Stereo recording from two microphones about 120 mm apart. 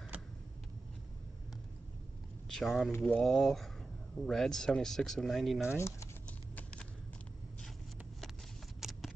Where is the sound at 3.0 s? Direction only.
10° left (ahead or behind).